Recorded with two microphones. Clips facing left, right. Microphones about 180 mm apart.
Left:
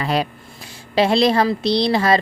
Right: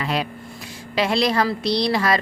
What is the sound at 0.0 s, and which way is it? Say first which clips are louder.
A woman's voice: left 4 dB; 35° left (ahead or behind).